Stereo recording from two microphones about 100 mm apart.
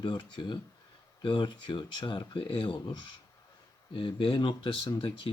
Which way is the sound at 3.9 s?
60° left (ahead or behind).